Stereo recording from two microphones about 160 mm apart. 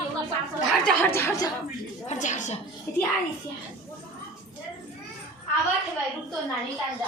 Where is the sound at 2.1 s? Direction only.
50° left (ahead or behind).